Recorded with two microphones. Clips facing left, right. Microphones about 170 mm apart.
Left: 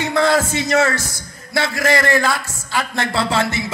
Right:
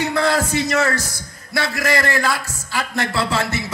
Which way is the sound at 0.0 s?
25° left (ahead or behind).